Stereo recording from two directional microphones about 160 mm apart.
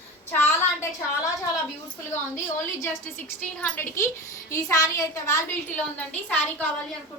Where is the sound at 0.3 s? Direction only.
15° left (ahead or behind).